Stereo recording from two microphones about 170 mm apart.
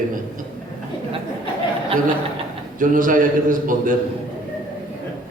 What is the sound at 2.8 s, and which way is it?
A man's voice, 50° right (ahead or behind).